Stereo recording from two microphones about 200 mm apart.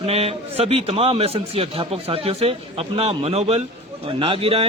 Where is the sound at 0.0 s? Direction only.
30° right (ahead or behind).